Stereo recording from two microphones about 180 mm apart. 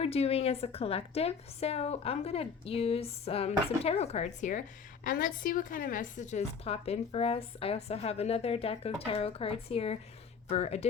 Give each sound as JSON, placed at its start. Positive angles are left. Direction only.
{"t": 0.0, "sound": "a woman's voice", "side_deg": 35}